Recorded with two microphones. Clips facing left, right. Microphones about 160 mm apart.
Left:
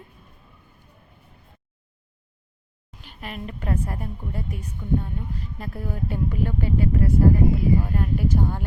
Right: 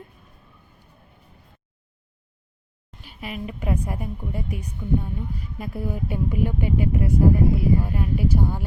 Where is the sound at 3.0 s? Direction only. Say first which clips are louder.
Right 2 dB; 5° right (ahead or behind).